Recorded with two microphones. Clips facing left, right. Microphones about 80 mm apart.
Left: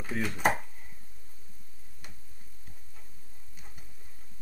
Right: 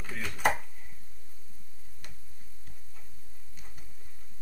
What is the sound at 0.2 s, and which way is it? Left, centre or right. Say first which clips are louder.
Dishes: left 1 dB; centre.